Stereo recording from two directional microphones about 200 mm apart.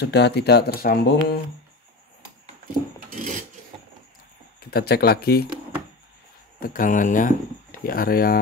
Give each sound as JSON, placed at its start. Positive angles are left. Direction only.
{"t": 0.0, "sound": "speech", "side_deg": 55}
{"t": 3.1, "sound": "cutlery", "side_deg": -40}
{"t": 4.6, "sound": "speech", "side_deg": 50}
{"t": 6.6, "sound": "speech", "side_deg": 45}